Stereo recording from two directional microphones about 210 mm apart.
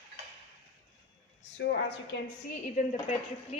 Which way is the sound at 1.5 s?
55° left (ahead or behind).